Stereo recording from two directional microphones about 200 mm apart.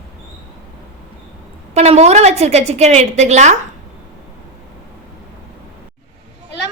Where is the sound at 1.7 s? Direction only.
35° right (ahead or behind).